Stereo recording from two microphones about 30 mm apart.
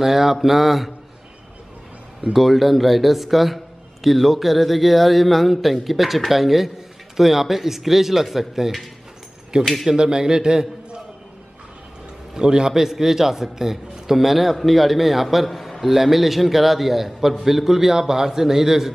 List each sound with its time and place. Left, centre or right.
0.0 s speech: centre
2.3 s a man's voice: centre
9.5 s a man's voice: right
12.4 s a man's voice: right
12.7 s a man's voice: centre